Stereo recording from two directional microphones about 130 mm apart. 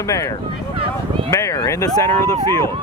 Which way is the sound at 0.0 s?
25° left (ahead or behind).